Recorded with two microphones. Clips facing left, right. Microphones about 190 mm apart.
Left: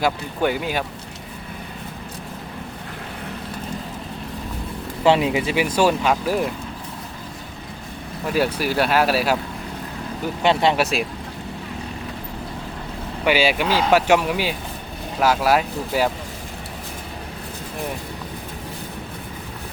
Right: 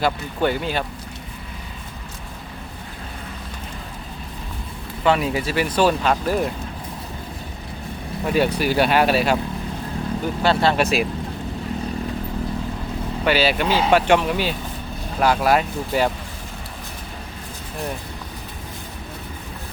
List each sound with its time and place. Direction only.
0.0 s speech: 10° left (ahead or behind)
5.0 s speech: 25° left (ahead or behind); by 6.5 s 10° left (ahead or behind)
8.5 s speech: centre (ahead or behind)
10.4 s speech: 20° left (ahead or behind)
10.8 s speech: centre (ahead or behind)
13.2 s speech: 10° left (ahead or behind)